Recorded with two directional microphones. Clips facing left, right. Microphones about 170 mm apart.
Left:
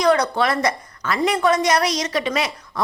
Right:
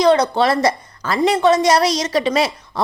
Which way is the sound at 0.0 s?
25° right (ahead or behind).